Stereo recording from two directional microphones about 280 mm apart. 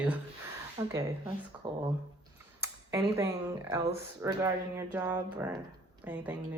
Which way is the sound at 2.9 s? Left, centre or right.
Centre.